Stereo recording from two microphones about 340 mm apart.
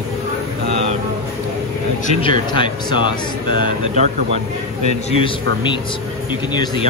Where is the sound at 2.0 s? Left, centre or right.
Centre.